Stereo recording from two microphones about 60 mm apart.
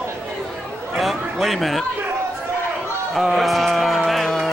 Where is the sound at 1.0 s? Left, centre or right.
Centre.